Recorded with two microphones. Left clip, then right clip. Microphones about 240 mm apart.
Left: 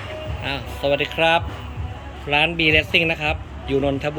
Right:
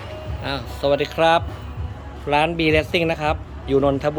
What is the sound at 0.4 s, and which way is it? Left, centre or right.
Speech, centre.